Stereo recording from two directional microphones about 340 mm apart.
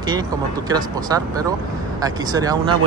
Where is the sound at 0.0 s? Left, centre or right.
Centre.